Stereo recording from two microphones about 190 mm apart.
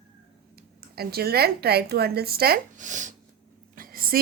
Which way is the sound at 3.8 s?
50° right (ahead or behind).